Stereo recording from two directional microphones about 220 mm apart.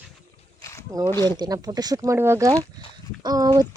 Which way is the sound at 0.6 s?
15° left (ahead or behind).